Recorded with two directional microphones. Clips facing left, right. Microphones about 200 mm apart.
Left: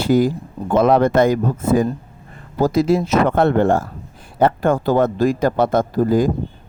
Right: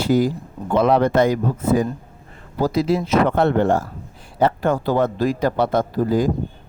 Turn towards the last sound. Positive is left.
turn(degrees=50)  # may be behind; listen again after turning